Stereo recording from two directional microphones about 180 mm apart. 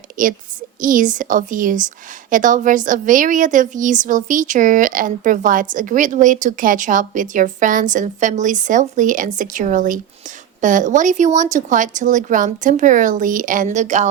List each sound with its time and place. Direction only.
0.2 s a woman's voice: 50° right (ahead or behind)